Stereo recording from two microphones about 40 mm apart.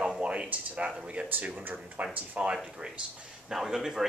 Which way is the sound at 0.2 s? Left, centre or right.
Right.